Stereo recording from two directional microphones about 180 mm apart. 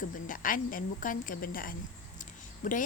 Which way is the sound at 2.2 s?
45° left (ahead or behind).